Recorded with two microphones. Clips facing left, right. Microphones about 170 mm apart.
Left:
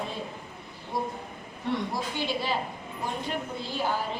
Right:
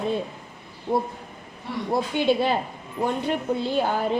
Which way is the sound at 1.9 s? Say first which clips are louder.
Right 9 dB; 55° right (ahead or behind).